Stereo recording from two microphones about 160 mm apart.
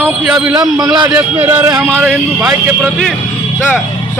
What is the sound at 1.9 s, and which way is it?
A man's voice, 10° right (ahead or behind).